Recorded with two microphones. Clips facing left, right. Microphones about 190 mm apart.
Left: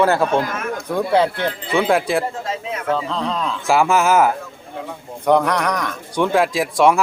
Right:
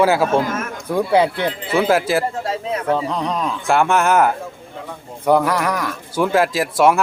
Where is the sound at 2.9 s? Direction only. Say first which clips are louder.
Even; 15° right (ahead or behind).